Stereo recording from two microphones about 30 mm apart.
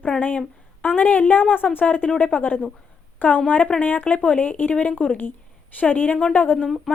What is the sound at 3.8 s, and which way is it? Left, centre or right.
Speech, left.